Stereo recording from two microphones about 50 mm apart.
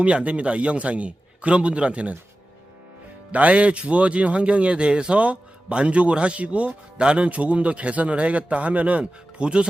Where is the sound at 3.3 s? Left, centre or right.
Right.